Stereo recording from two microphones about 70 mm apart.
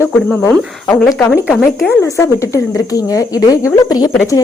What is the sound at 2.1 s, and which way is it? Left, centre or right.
A woman's voice, left.